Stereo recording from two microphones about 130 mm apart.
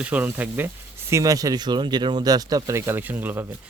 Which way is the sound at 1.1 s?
25° right (ahead or behind).